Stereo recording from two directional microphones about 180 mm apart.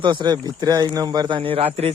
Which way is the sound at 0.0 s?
25° right (ahead or behind).